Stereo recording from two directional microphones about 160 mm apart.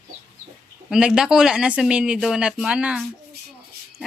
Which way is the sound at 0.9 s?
5° right (ahead or behind).